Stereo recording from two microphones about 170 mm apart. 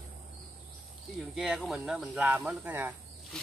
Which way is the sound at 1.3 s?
Centre (ahead or behind).